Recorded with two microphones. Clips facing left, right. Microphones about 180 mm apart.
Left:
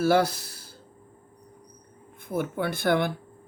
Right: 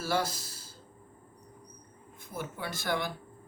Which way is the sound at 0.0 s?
60° left (ahead or behind).